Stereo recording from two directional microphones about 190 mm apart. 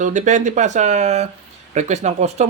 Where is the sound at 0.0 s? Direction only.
40° right (ahead or behind).